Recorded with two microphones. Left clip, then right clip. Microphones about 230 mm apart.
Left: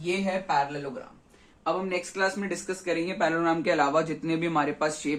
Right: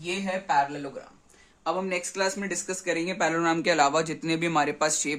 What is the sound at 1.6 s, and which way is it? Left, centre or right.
Speech, right.